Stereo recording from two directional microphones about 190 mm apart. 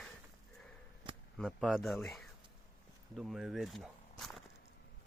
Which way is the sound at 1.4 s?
5° right (ahead or behind).